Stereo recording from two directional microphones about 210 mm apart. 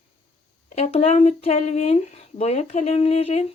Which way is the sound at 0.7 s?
35° left (ahead or behind).